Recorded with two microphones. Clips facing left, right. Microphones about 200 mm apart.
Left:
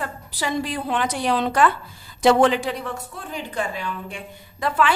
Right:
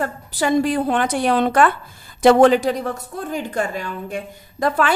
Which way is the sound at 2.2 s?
45° right (ahead or behind).